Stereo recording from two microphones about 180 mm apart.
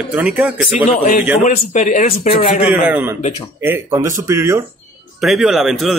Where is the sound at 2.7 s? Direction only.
10° right (ahead or behind).